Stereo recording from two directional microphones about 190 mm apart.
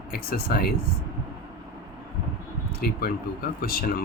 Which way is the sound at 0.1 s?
50° left (ahead or behind).